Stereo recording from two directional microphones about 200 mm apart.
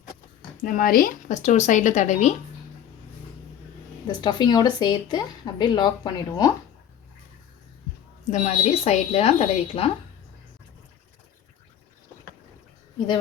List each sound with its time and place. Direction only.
0.6 s speech: 45° left (ahead or behind)
4.0 s a woman's voice: 20° left (ahead or behind)
8.3 s speech: 35° left (ahead or behind)